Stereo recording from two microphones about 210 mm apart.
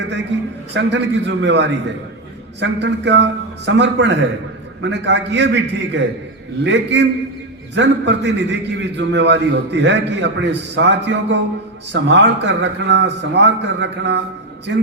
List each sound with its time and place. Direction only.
0.7 s a man's voice: 55° right (ahead or behind)